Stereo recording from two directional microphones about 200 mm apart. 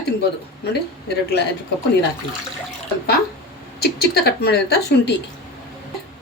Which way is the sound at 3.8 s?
50° left (ahead or behind).